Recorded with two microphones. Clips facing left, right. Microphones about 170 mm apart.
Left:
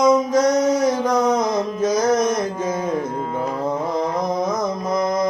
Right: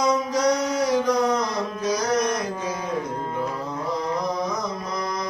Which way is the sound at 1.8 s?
50° left (ahead or behind).